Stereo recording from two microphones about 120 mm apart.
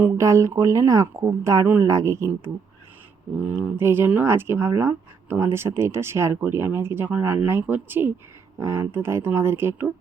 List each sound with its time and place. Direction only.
0.0 s speech: 25° right (ahead or behind)
3.3 s speech: 15° right (ahead or behind)